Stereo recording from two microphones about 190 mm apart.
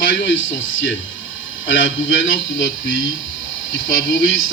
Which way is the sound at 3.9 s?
80° left.